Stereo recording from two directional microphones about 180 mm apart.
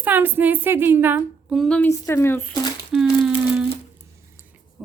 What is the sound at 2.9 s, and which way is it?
Crumpling, 5° right (ahead or behind).